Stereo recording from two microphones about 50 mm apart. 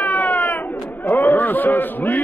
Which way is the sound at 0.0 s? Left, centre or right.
Left.